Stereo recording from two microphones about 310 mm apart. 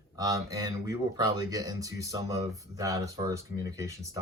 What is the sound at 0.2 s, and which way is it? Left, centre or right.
Speech, centre.